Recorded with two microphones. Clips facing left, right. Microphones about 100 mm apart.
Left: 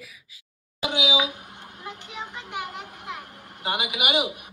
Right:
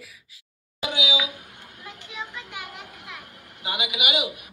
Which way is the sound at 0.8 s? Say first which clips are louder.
Left 3 dB; 25° left (ahead or behind).